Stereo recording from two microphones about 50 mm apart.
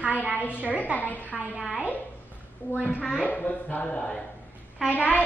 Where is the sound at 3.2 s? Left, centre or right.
Left.